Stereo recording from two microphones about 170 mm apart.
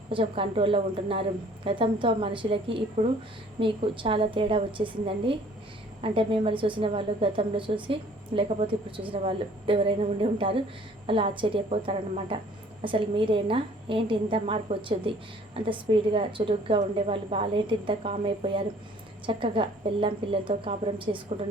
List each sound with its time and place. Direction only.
0.1 s a woman's voice: 30° right (ahead or behind)